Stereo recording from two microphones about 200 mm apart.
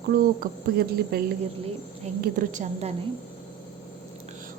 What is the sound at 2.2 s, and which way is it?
Speech, 40° right (ahead or behind).